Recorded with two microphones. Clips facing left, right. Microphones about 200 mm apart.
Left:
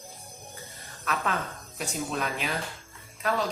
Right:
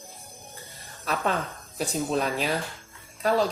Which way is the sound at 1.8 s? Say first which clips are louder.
Right 5 dB; 35° right (ahead or behind).